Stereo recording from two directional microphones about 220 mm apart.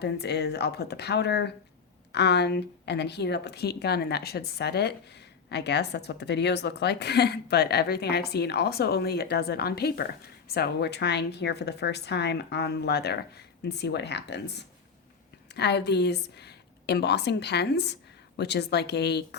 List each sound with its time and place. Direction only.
0.0 s a woman's voice: 50° left (ahead or behind)
15.5 s a woman's voice: 50° left (ahead or behind)